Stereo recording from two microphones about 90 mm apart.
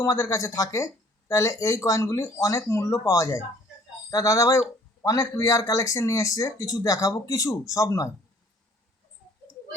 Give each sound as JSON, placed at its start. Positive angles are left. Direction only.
{"t": 0.0, "sound": "speech", "side_deg": 35}